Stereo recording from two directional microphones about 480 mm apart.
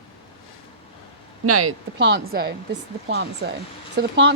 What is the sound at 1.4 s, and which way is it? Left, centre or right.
Speech, right.